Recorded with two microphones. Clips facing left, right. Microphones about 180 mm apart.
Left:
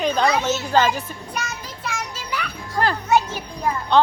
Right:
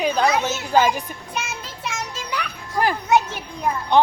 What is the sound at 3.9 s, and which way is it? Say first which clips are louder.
Speech: even; 15° right (ahead or behind).